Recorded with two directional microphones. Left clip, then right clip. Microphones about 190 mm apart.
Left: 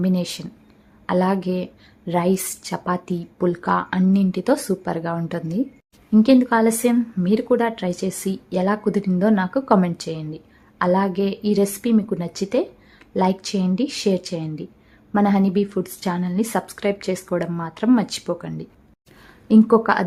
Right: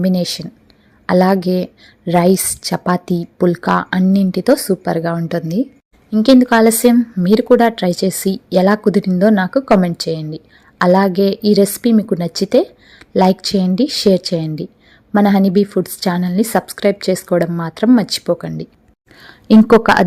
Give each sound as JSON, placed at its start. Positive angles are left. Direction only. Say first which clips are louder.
{"t": 0.0, "sound": "a woman's voice", "louder": "right 7 dB", "side_deg": -25}
{"t": 5.1, "sound": "a woman's voice", "louder": "right 6 dB", "side_deg": -15}